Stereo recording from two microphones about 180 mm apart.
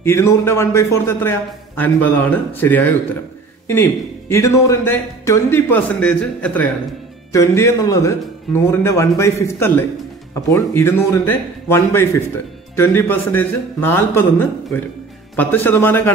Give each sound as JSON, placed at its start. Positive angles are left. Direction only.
{"t": 0.0, "sound": "speech", "side_deg": 15}